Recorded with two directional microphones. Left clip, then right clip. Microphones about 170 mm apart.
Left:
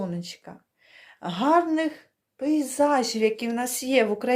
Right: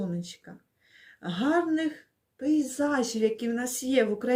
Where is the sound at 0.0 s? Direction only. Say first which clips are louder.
Left 3 dB; 20° right (ahead or behind).